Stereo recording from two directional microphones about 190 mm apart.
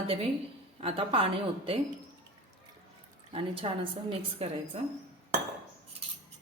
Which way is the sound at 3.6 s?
25° right (ahead or behind).